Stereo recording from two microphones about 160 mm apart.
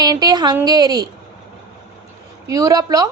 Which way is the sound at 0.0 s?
25° right (ahead or behind).